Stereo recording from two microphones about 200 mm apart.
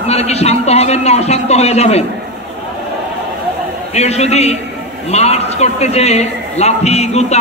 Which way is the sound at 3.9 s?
35° left (ahead or behind).